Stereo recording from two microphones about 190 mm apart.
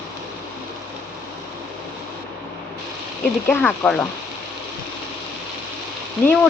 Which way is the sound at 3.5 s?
5° left (ahead or behind).